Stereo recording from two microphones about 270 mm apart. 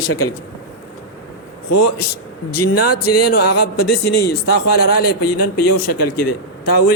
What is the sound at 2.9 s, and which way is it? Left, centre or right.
Music, left.